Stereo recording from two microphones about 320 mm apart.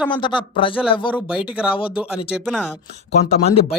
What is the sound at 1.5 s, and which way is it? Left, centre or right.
Speech, centre.